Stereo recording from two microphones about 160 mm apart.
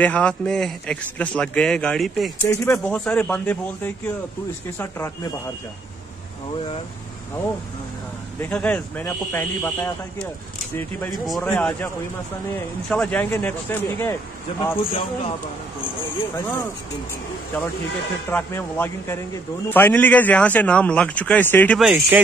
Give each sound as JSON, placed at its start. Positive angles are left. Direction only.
{"t": 0.0, "sound": "a man's voice", "side_deg": 5}
{"t": 2.4, "sound": "speech", "side_deg": 20}
{"t": 2.9, "sound": "a man's voice", "side_deg": 10}
{"t": 8.4, "sound": "a man's voice", "side_deg": 10}
{"t": 11.2, "sound": "a man's voice", "side_deg": 0}
{"t": 11.5, "sound": "a man's voice", "side_deg": 15}
{"t": 14.8, "sound": "speech", "side_deg": 35}
{"t": 16.3, "sound": "a man's voice", "side_deg": 15}
{"t": 18.3, "sound": "a man's voice", "side_deg": 15}
{"t": 21.7, "sound": "a man's voice", "side_deg": -5}